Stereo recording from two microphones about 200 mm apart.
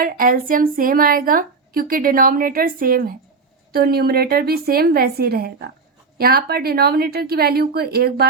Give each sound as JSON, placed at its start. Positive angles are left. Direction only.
{"t": 0.0, "sound": "a woman's voice", "side_deg": -45}